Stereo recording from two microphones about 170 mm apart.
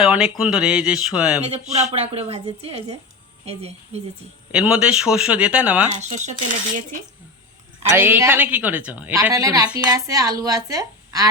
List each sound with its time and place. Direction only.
0.0 s speech: 5° right (ahead or behind)
1.4 s a woman's voice: 40° right (ahead or behind)
4.5 s a woman's voice: 5° right (ahead or behind)
6.0 s speech: 45° right (ahead or behind)
7.9 s a woman's voice: 10° right (ahead or behind)